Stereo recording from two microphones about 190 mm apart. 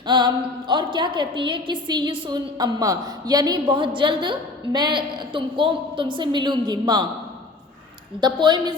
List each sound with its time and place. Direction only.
0.0 s a woman's voice: 25° right (ahead or behind)
8.2 s a woman's voice: 25° right (ahead or behind)